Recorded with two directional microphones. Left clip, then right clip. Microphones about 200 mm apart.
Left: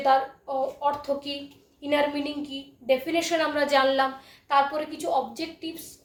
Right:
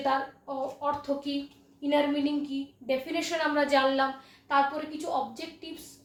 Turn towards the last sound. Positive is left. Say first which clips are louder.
# left 6 dB
turn(degrees=30)  # may be behind; listen again after turning